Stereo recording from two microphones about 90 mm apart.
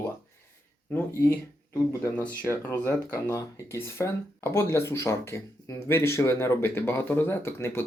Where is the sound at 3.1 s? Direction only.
35° left (ahead or behind).